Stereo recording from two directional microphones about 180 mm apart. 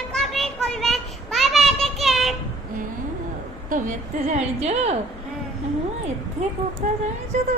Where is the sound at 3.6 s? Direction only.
50° right (ahead or behind).